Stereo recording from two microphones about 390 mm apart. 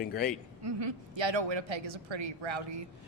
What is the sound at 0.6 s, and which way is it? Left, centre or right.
Speech, right.